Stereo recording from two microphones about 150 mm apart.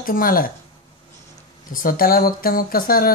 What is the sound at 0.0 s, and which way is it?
Speech, 70° left (ahead or behind).